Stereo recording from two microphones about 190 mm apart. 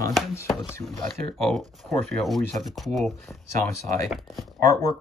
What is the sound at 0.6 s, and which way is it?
Speech, 15° left (ahead or behind).